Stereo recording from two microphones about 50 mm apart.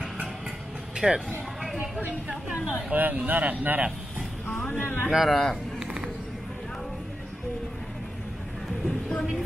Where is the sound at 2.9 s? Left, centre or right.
Right.